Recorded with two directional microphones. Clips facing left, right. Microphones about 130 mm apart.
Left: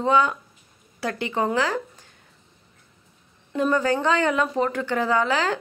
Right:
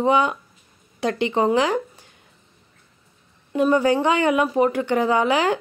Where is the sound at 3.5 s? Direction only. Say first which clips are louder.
Right 4 dB; 15° right (ahead or behind).